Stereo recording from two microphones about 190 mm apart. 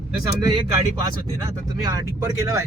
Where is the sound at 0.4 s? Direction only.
25° right (ahead or behind).